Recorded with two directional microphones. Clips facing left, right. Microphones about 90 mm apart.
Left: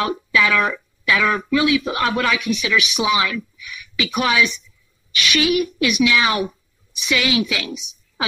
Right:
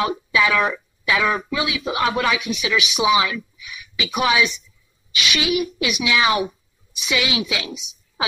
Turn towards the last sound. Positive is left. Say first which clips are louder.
# left 3 dB
turn(degrees=-20)  # may be behind; listen again after turning